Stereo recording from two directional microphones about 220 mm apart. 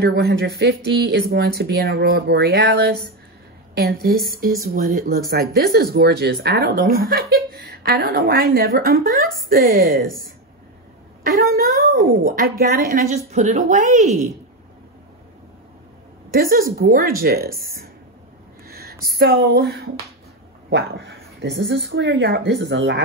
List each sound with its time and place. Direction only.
0.0 s speech: 45° right (ahead or behind)
11.5 s speech: 40° right (ahead or behind)
16.3 s speech: 40° right (ahead or behind)